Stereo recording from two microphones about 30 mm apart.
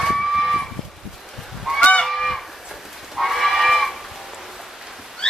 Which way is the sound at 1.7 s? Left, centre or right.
Right.